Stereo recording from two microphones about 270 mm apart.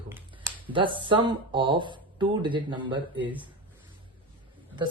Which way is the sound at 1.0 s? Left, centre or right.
Centre.